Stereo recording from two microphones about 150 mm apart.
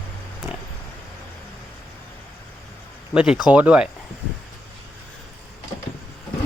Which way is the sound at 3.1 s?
5° right (ahead or behind).